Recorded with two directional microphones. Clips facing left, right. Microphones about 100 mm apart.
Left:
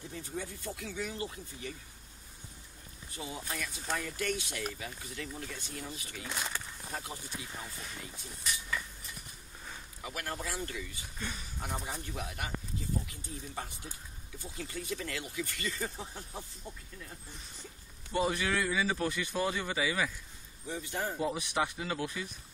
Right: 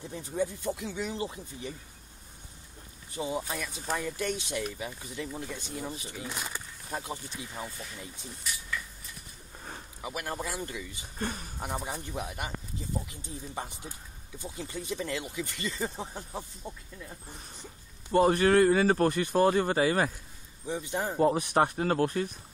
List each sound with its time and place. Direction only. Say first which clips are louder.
0.1 s speech: right 10 dB; 20° right (ahead or behind)
3.2 s speech: right 7 dB; 25° right (ahead or behind)
6.2 s a sound: left 2 dB; 10° right (ahead or behind)
10.0 s speech: right 4 dB; 20° right (ahead or behind)
11.1 s speech: right 7 dB; 45° right (ahead or behind)
11.6 s speech: right 4 dB; 20° right (ahead or behind)
18.1 s speech: right 9 dB; 45° right (ahead or behind)
20.6 s speech: right 4 dB; 20° right (ahead or behind)
21.2 s speech: right 10 dB; 50° right (ahead or behind)